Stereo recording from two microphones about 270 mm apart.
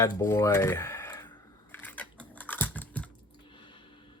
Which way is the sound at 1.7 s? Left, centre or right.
Centre.